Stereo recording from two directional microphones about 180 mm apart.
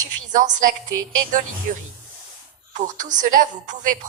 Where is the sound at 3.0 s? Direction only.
45° right (ahead or behind).